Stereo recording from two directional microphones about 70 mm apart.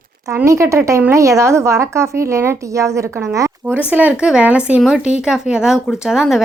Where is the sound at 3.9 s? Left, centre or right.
Right.